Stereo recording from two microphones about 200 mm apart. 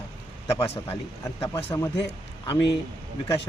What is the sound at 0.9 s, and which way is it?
Speech, 15° left (ahead or behind).